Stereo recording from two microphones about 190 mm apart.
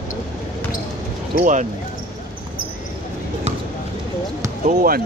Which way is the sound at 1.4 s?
40° right (ahead or behind).